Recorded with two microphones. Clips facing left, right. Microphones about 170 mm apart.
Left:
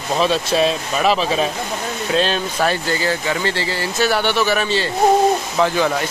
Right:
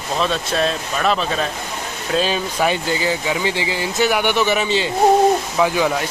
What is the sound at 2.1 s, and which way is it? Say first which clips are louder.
Speech: even; 10° right (ahead or behind).